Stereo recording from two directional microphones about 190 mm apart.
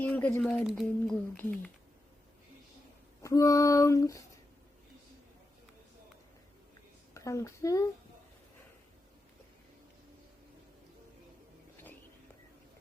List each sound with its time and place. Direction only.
0.0 s speech: 10° left (ahead or behind)
3.2 s speech: 15° left (ahead or behind)
7.1 s a child's voice: 15° left (ahead or behind)